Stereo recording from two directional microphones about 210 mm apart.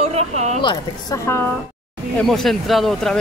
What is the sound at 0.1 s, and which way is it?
Speech, 30° right (ahead or behind).